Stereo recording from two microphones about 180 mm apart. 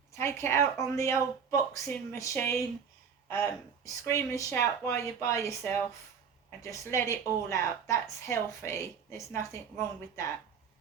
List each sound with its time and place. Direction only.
0.2 s a woman's voice: 15° left (ahead or behind)
4.0 s a woman's voice: 15° left (ahead or behind)